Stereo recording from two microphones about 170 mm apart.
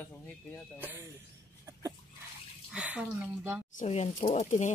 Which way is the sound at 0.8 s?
10° right (ahead or behind).